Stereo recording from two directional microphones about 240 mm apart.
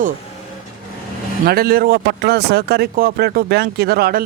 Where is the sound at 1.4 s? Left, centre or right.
Right.